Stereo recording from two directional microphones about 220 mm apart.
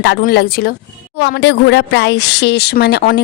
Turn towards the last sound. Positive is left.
turn(degrees=50)  # may be behind; listen again after turning